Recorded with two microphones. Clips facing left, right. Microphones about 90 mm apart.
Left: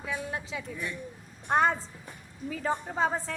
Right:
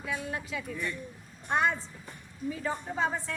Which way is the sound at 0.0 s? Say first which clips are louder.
Even; 25° left (ahead or behind).